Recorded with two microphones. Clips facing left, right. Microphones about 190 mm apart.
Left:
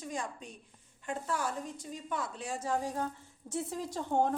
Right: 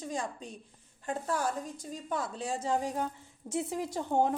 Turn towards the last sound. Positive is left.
turn(degrees=-10)  # may be behind; listen again after turning